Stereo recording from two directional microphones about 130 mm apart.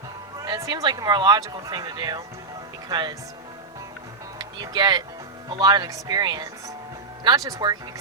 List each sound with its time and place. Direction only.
0.3 s speech: 30° right (ahead or behind)
4.4 s speech: 35° right (ahead or behind)